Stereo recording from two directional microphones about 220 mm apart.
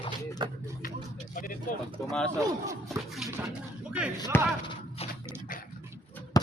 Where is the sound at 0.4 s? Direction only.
20° right (ahead or behind).